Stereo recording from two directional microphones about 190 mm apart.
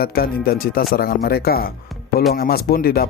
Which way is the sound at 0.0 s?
50° left (ahead or behind).